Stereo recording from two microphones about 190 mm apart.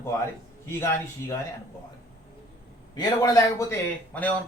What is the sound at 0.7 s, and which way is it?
Speech, 15° left (ahead or behind).